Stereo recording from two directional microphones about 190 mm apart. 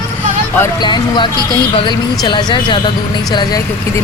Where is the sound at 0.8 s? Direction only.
25° left (ahead or behind).